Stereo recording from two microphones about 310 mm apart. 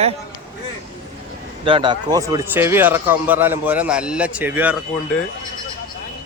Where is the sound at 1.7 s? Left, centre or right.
Centre.